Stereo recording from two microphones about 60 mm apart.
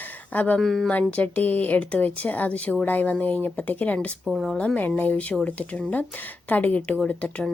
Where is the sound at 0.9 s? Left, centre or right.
Left.